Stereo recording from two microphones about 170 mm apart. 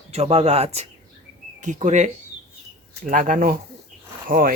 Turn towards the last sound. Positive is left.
turn(degrees=-55)  # may be behind; listen again after turning